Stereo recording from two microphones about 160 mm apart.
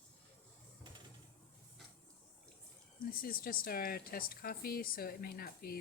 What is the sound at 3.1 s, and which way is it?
Speech, 65° left (ahead or behind).